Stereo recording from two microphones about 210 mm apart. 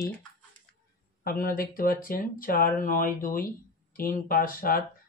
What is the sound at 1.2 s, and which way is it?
Speech, 45° left (ahead or behind).